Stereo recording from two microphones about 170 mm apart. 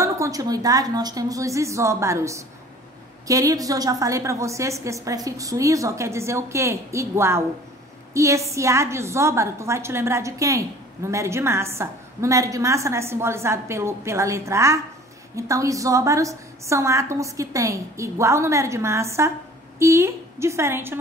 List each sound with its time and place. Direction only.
0.0 s a woman's voice: 20° right (ahead or behind)